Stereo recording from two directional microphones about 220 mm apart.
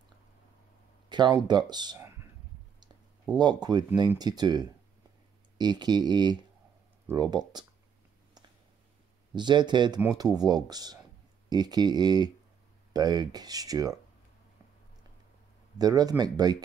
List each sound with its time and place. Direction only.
1.0 s speech: 20° right (ahead or behind)
3.3 s speech: 20° right (ahead or behind)
9.3 s speech: 20° right (ahead or behind)
15.8 s speech: 15° right (ahead or behind)